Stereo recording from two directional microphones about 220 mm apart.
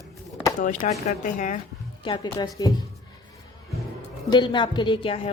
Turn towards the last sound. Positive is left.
turn(degrees=25)  # may be behind; listen again after turning